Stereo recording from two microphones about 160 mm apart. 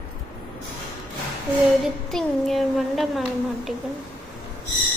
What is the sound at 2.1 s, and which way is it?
Speech, 5° left (ahead or behind).